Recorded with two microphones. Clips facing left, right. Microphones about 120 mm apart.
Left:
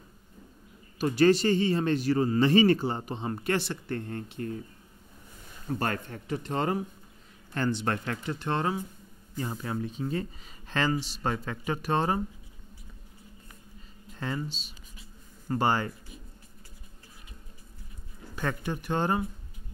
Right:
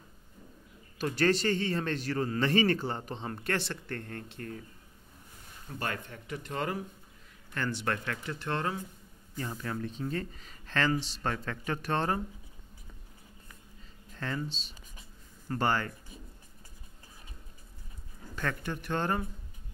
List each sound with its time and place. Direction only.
0.9 s a man's voice: 10° left (ahead or behind)
5.8 s a man's voice: 40° left (ahead or behind); by 12.2 s 10° left (ahead or behind)
14.1 s speech: 15° left (ahead or behind)
15.4 s a man's voice: 15° left (ahead or behind)
18.3 s a man's voice: 15° left (ahead or behind)